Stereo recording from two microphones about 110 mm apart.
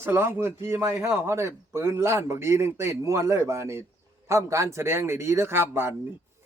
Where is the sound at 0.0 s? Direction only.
20° right (ahead or behind).